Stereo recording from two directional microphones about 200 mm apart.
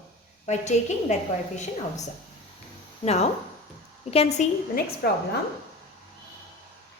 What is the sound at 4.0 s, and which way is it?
Speech, 30° left (ahead or behind).